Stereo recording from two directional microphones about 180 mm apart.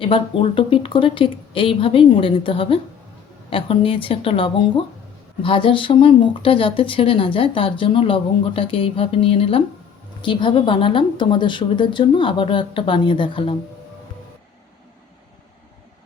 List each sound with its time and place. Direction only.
0.0 s a woman's voice: 30° left (ahead or behind)